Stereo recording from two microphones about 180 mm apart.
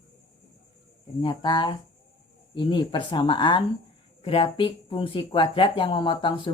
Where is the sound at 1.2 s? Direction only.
25° left (ahead or behind).